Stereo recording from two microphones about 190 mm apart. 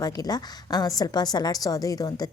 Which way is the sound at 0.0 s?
20° left (ahead or behind).